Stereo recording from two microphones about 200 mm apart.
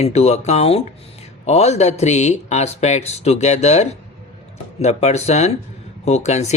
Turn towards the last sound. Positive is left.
turn(degrees=35)  # may be behind; listen again after turning